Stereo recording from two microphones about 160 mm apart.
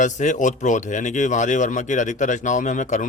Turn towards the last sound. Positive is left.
turn(degrees=50)  # may be behind; listen again after turning